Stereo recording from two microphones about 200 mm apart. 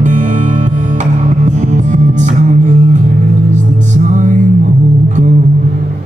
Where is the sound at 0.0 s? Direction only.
40° right (ahead or behind).